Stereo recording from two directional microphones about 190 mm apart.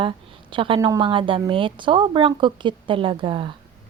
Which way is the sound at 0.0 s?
25° right (ahead or behind).